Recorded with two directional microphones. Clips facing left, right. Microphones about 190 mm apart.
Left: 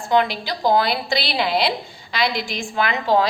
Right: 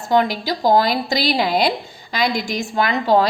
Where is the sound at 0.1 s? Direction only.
45° right (ahead or behind).